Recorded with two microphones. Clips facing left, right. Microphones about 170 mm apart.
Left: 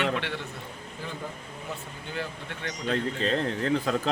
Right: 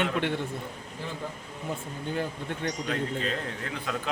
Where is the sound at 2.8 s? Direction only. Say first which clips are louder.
Left 6 dB; 30° left (ahead or behind).